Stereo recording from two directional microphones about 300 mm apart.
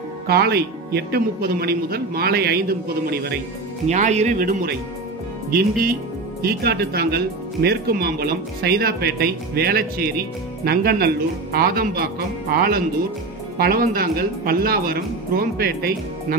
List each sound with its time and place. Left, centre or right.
0.3 s speech: right